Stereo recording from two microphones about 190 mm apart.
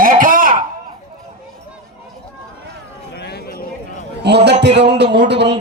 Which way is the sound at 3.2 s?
55° left (ahead or behind).